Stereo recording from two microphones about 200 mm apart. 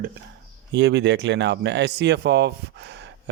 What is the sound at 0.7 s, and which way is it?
Speech, 60° right (ahead or behind).